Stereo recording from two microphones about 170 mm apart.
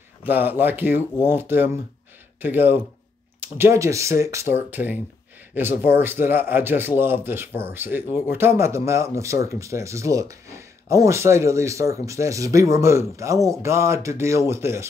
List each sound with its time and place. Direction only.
0.2 s speech: 10° right (ahead or behind)